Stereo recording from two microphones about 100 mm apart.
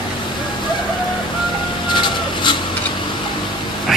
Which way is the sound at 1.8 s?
50° left (ahead or behind).